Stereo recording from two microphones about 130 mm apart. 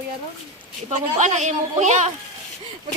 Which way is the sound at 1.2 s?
70° right (ahead or behind).